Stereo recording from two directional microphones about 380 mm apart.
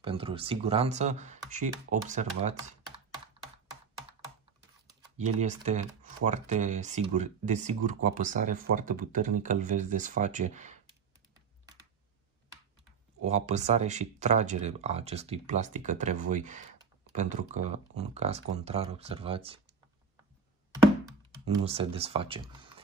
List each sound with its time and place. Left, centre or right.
0.0 s speech: centre
5.1 s speech: centre
13.2 s speech: centre
21.6 s speech: centre